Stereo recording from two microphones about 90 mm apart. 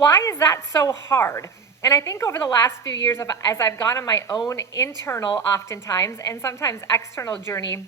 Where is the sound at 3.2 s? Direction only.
45° left (ahead or behind).